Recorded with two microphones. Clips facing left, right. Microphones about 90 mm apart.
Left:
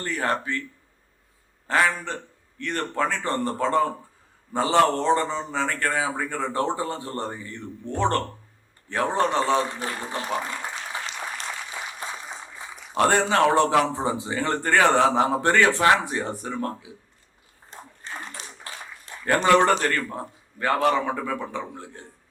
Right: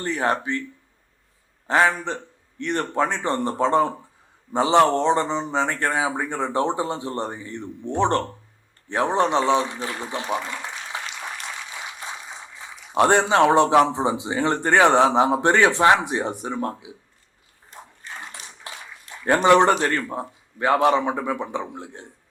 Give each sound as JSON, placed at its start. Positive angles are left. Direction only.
{"t": 0.0, "sound": "a man's voice", "side_deg": -20}
{"t": 1.6, "sound": "a man's voice", "side_deg": -20}
{"t": 12.9, "sound": "a man's voice", "side_deg": -20}
{"t": 18.2, "sound": "bathtub", "side_deg": -20}
{"t": 19.2, "sound": "a man's voice", "side_deg": -20}